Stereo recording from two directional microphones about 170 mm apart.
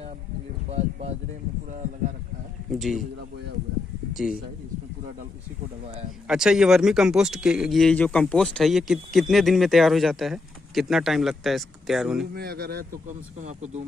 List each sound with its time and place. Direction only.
0.7 s a sound: 40° right (ahead or behind)
2.7 s speech: centre (ahead or behind)
4.1 s speech: 5° right (ahead or behind)
6.2 s speech: 5° right (ahead or behind)
12.4 s speech: 65° right (ahead or behind)
13.4 s speech: 45° right (ahead or behind)